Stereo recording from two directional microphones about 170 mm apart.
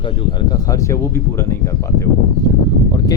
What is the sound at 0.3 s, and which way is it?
Speech, 20° left (ahead or behind).